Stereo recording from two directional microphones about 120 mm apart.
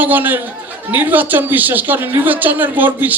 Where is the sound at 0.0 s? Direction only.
15° right (ahead or behind).